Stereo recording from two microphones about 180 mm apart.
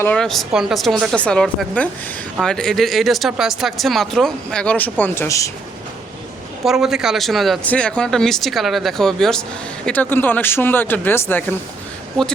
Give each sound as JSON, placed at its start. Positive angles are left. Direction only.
{"t": 0.0, "sound": "speech", "side_deg": 5}
{"t": 6.7, "sound": "speech", "side_deg": 0}